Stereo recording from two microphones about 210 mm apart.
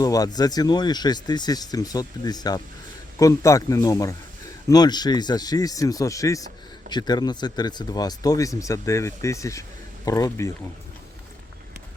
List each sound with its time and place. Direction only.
0.0 s speech: 15° left (ahead or behind)